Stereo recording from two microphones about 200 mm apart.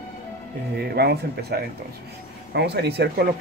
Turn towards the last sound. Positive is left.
turn(degrees=-55)  # may be behind; listen again after turning